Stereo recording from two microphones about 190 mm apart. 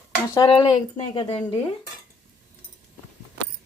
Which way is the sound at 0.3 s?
25° left (ahead or behind).